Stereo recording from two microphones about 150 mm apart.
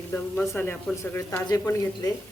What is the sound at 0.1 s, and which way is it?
A woman's voice, 10° left (ahead or behind).